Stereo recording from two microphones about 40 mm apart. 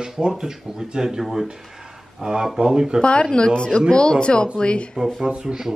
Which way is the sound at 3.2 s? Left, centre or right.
Centre.